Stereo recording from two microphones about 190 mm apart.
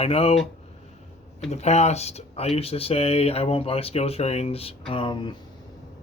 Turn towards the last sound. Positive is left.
turn(degrees=25)  # may be behind; listen again after turning